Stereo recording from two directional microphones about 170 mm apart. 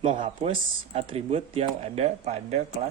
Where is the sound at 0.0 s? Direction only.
35° right (ahead or behind).